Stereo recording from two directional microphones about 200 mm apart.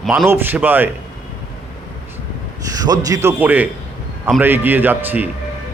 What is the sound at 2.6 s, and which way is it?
A man's voice, 20° right (ahead or behind).